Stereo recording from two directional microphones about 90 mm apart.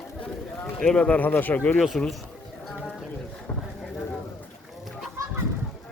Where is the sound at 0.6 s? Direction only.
10° left (ahead or behind).